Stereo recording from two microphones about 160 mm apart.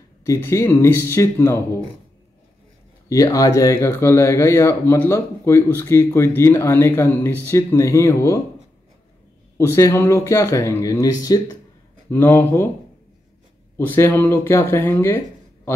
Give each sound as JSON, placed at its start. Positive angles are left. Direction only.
{"t": 0.2, "sound": "speech", "side_deg": 15}
{"t": 3.1, "sound": "speech", "side_deg": 20}
{"t": 9.6, "sound": "speech", "side_deg": 15}
{"t": 13.7, "sound": "speech", "side_deg": 15}